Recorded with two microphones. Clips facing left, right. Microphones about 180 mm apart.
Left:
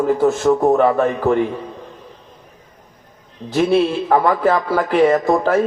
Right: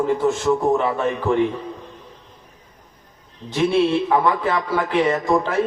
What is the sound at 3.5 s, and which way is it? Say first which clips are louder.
A man's voice: left 2 dB; 40° left (ahead or behind).